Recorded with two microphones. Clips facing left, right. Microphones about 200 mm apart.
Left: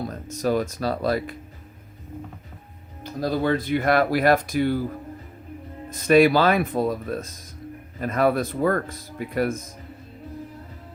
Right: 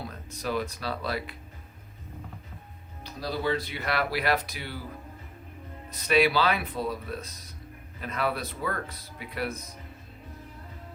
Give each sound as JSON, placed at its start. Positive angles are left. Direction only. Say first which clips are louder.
{"t": 0.0, "sound": "speech", "louder": "left 9 dB", "side_deg": 45}
{"t": 3.0, "sound": "speech", "louder": "left 7 dB", "side_deg": 50}
{"t": 5.9, "sound": "speech", "louder": "left 8 dB", "side_deg": 45}